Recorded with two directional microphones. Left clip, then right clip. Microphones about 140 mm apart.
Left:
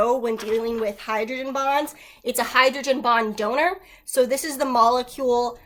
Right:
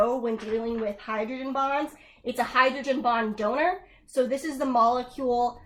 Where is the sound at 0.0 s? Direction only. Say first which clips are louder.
Left 4 dB; 20° left (ahead or behind).